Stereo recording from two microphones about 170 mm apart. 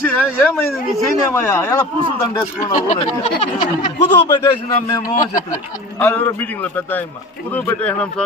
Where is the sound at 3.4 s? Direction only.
25° left (ahead or behind).